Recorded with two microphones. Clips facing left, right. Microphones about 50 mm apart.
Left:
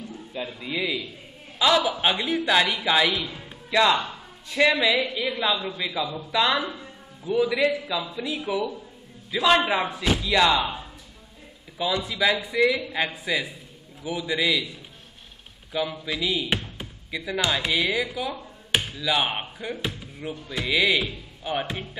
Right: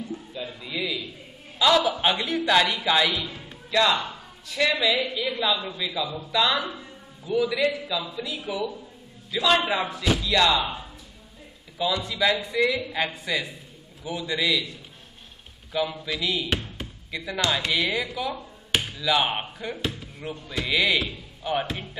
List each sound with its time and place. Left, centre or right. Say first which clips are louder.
0.6 s a man's voice: left 2 dB; centre
4.0 s speech: even; left
9.8 s speech: left 1 dB; left
12.0 s speech: even; centre
15.7 s speech: even; centre